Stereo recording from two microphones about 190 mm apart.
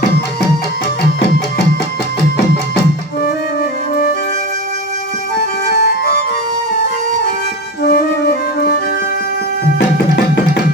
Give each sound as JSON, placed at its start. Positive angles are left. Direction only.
{"t": 5.7, "sound": "music", "side_deg": 55}
{"t": 7.8, "sound": "flute", "side_deg": 50}
{"t": 9.7, "sound": "music", "side_deg": 60}